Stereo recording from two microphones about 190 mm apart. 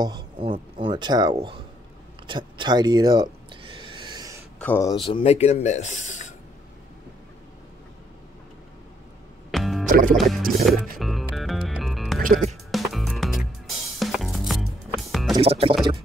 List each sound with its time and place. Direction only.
0.0 s speech: 25° right (ahead or behind)
2.2 s a sound: 25° right (ahead or behind)
4.6 s speech: 10° left (ahead or behind)
5.0 s speech: 30° left (ahead or behind)
9.5 s music: centre (ahead or behind)
9.8 s music: 45° right (ahead or behind)
10.1 s music: centre (ahead or behind)
15.3 s speech: 30° right (ahead or behind)